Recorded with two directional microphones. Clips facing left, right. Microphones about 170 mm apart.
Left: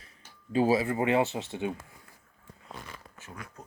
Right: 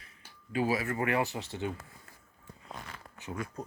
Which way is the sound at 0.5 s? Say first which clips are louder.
Left 5 dB; 30° left (ahead or behind).